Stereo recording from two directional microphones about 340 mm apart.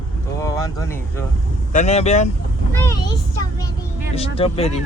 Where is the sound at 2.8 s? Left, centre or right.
Centre.